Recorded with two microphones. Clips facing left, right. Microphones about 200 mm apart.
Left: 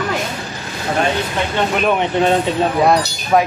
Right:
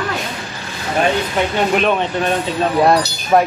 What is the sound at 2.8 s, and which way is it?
Speech, centre (ahead or behind).